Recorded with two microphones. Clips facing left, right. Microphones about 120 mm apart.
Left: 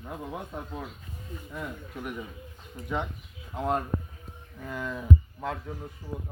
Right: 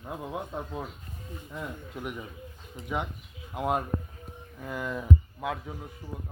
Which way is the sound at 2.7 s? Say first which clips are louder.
Left 1 dB; 15° right (ahead or behind).